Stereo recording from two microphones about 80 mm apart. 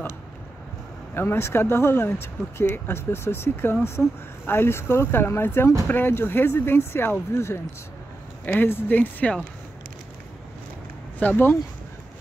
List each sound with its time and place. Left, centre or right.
1.1 s speech: left
11.1 s speech: left